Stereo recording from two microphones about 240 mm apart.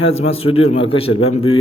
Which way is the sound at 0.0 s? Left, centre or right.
Left.